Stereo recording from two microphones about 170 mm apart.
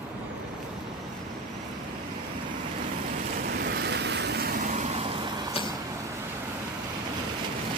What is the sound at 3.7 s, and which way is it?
Vehicle, 90° right.